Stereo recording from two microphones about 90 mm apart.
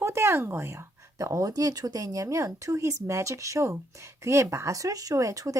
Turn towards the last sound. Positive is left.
turn(degrees=-40)  # may be behind; listen again after turning